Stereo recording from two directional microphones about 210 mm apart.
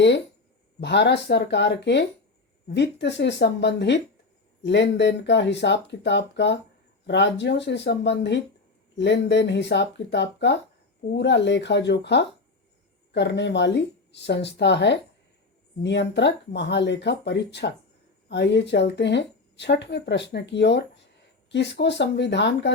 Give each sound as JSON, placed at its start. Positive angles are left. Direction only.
{"t": 0.8, "sound": "speech", "side_deg": 55}